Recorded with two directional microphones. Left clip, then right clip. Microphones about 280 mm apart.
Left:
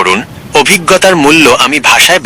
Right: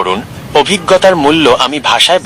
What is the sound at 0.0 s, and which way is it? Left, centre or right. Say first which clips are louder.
Speech: left 5 dB; left.